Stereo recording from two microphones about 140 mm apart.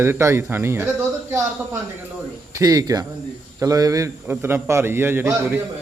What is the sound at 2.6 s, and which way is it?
A man's voice, 25° right (ahead or behind).